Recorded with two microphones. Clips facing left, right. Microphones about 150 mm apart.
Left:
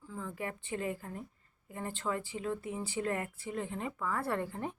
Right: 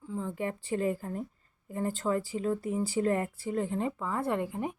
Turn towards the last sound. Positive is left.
turn(degrees=-15)  # may be behind; listen again after turning